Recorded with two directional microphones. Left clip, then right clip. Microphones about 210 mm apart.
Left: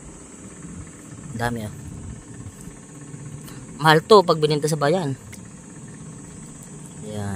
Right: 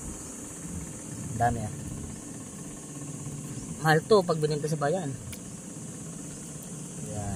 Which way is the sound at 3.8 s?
55° left (ahead or behind).